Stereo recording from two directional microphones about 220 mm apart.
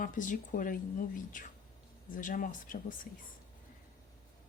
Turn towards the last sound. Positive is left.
turn(degrees=35)  # may be behind; listen again after turning